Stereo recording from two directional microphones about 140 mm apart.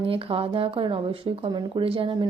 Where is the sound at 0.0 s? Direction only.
40° right (ahead or behind).